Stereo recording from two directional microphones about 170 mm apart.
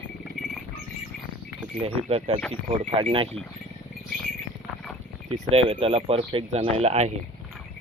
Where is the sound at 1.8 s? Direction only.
35° right (ahead or behind).